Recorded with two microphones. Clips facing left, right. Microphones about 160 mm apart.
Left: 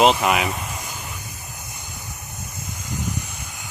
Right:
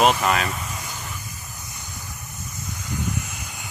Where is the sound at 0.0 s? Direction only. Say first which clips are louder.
Left 2 dB; 20° left (ahead or behind).